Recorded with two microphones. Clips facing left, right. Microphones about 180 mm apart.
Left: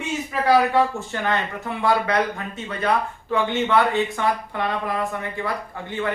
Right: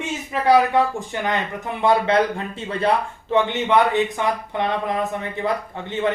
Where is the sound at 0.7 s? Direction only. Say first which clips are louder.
Right 1 dB; 15° right (ahead or behind).